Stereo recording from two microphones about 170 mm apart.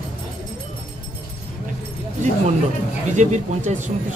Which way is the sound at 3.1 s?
45° right (ahead or behind).